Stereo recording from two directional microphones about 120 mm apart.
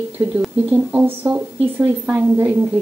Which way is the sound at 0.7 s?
15° right (ahead or behind).